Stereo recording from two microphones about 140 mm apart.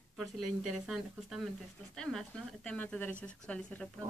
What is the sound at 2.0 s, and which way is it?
Speech, 5° left (ahead or behind).